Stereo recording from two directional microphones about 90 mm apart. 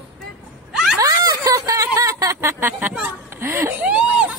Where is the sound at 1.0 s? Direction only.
40° right (ahead or behind).